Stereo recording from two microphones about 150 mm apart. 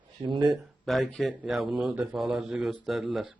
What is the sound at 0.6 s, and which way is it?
Speech, centre (ahead or behind).